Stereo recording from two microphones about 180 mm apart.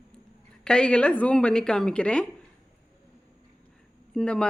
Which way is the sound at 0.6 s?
5° left (ahead or behind).